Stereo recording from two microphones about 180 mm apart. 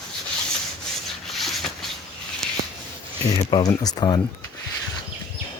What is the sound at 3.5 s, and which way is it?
Speech, 20° left (ahead or behind).